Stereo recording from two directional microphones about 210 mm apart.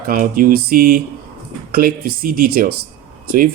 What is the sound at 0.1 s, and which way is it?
Speech, 45° right (ahead or behind).